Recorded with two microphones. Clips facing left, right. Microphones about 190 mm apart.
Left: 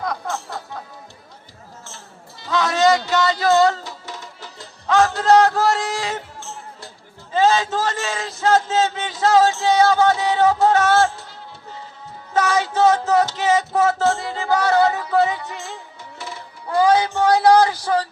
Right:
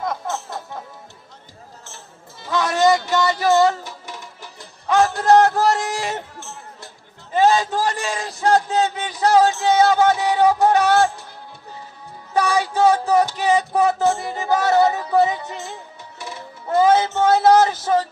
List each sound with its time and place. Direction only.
0.0 s music: 20° right (ahead or behind)
2.4 s music: 20° right (ahead or behind)
4.9 s a sound: 15° right (ahead or behind)
7.3 s a man's voice: 15° right (ahead or behind)
9.6 s music: 20° right (ahead or behind)
12.3 s music: 15° right (ahead or behind)